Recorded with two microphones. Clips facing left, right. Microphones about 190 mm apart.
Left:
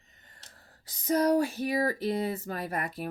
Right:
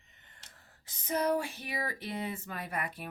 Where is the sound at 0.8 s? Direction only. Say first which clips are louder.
Left 6 dB; 40° left (ahead or behind).